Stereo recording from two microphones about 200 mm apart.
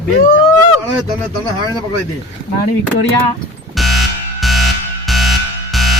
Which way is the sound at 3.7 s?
Centre (ahead or behind).